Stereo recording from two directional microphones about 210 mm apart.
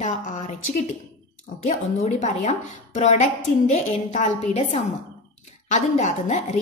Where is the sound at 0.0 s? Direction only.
35° left (ahead or behind).